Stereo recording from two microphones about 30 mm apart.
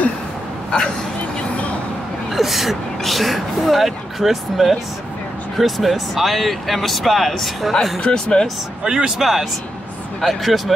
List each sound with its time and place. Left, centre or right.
2.3 s speech: centre
8.0 s speech: left
8.8 s speech: right
9.2 s speech: centre